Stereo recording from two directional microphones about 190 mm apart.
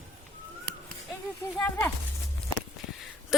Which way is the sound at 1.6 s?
10° left (ahead or behind).